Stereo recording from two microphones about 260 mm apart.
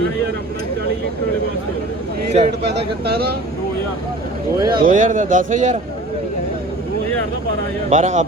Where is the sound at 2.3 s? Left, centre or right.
Right.